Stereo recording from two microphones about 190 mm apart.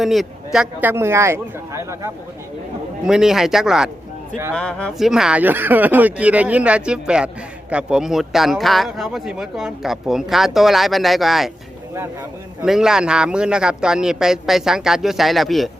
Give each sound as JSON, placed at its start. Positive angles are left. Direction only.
{"t": 0.0, "sound": "speech", "side_deg": 0}
{"t": 3.1, "sound": "speech", "side_deg": -5}
{"t": 12.6, "sound": "speech", "side_deg": -5}